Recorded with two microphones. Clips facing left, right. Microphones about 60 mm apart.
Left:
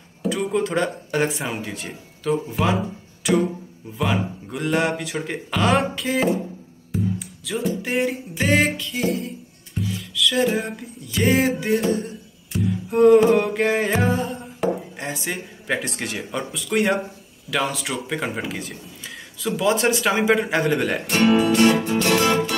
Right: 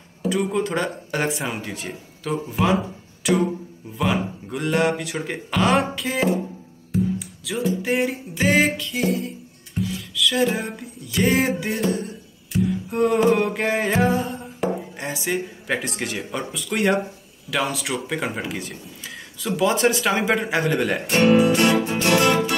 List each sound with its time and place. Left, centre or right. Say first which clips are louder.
0.2 s speech: even; centre
4.0 s speech: even; centre
6.9 s music: right 2 dB; centre
17.5 s speech: even; centre
21.4 s music: even; centre
22.0 s music: right 2 dB; right